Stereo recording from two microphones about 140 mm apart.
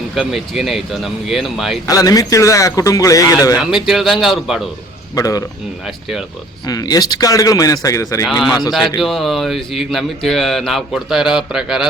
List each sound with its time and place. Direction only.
0.2 s speech: centre (ahead or behind)
1.9 s a man's voice: 25° left (ahead or behind)
3.6 s speech: centre (ahead or behind)
5.1 s a man's voice: 25° left (ahead or behind)
5.8 s speech: 5° right (ahead or behind)
6.7 s a man's voice: 25° left (ahead or behind)
8.3 s speech: centre (ahead or behind)